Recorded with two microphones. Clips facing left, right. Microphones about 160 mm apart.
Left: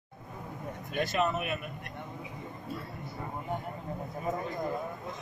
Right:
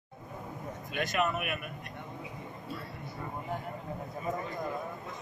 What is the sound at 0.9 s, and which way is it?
Speech, 30° left (ahead or behind).